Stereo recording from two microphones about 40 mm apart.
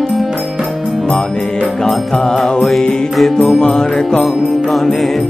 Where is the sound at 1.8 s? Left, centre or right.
Centre.